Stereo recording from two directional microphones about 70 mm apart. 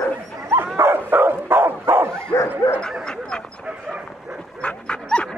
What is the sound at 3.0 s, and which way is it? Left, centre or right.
Dog, centre.